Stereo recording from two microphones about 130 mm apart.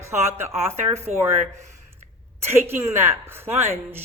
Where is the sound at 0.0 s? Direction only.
20° right (ahead or behind).